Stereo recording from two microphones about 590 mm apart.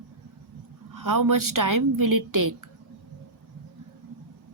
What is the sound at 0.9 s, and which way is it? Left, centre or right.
A woman's voice, right.